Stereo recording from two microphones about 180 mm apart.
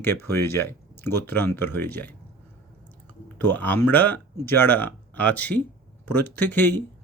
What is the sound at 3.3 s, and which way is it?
Speech, 10° left (ahead or behind).